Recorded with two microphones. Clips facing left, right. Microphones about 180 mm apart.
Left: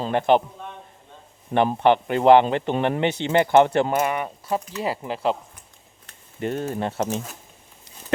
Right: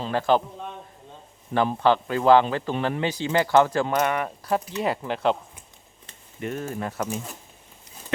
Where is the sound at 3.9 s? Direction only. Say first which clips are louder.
Left 1 dB; 5° left (ahead or behind).